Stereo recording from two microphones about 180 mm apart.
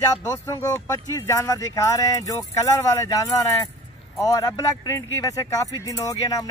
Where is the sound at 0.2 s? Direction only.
15° left (ahead or behind).